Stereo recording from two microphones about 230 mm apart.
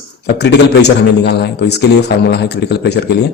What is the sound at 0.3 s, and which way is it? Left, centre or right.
Speech, left.